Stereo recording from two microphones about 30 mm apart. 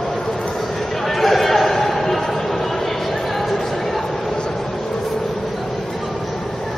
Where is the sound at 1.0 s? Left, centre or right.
Centre.